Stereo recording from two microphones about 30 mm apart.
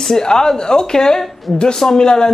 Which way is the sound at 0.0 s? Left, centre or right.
Centre.